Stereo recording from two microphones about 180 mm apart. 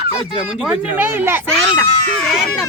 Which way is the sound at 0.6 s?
10° right (ahead or behind).